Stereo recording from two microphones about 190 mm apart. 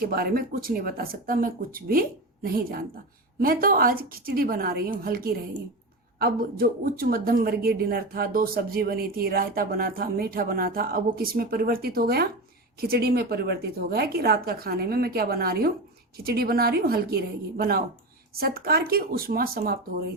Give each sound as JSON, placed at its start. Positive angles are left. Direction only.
{"t": 0.0, "sound": "a woman's voice", "side_deg": -50}